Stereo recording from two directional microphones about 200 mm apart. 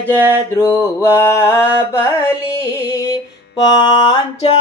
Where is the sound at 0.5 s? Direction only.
15° left (ahead or behind).